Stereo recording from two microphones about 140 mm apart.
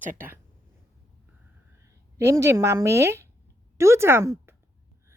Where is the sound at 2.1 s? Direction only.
20° right (ahead or behind).